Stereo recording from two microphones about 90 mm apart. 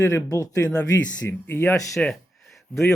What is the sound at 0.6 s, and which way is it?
Speech, 15° left (ahead or behind).